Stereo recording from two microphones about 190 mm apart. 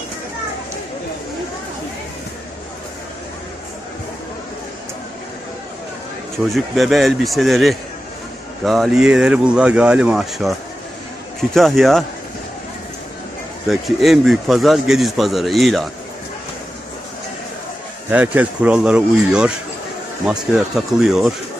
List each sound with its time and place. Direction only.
6.5 s speech: centre (ahead or behind)
13.7 s speech: centre (ahead or behind)
18.1 s speech: 10° right (ahead or behind)
20.7 s speech: centre (ahead or behind)